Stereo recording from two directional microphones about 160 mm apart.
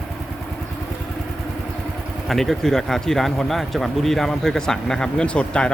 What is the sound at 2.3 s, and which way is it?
Speech, centre (ahead or behind).